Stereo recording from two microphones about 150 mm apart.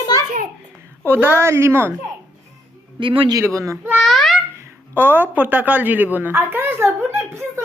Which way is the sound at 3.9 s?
Centre (ahead or behind).